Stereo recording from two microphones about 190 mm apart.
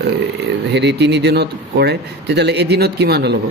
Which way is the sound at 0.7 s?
65° right (ahead or behind).